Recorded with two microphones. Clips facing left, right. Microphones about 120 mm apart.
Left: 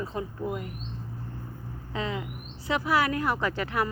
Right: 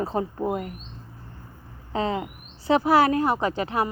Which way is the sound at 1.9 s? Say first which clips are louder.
Right 6 dB; 35° right (ahead or behind).